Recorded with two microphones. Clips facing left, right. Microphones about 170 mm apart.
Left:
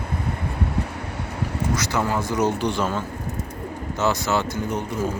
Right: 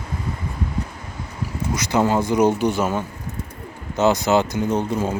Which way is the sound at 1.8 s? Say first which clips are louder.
Right 8 dB; 20° right (ahead or behind).